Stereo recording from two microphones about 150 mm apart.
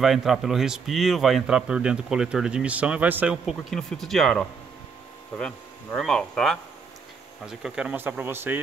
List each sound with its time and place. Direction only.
0.0 s a man's voice: centre (ahead or behind)
3.7 s a man's voice: 5° left (ahead or behind)
5.3 s speech: 15° left (ahead or behind)
5.9 s a man's voice: 5° left (ahead or behind); by 8.5 s 15° right (ahead or behind)